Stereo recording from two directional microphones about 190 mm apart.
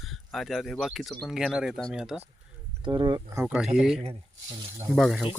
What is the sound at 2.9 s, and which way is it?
Speech, 20° right (ahead or behind).